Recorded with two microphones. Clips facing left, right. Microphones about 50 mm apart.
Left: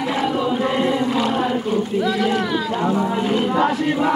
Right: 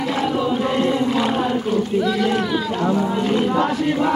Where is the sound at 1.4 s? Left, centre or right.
Centre.